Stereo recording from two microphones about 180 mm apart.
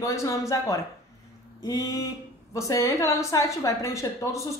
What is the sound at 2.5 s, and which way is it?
A woman's voice, 15° left (ahead or behind).